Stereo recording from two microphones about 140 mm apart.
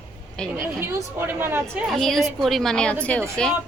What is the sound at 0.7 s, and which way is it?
Speech, 15° right (ahead or behind).